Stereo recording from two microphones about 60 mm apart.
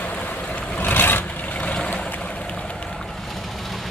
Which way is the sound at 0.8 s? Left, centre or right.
Left.